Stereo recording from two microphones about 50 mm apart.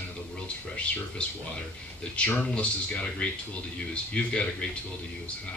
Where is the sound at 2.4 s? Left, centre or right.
Left.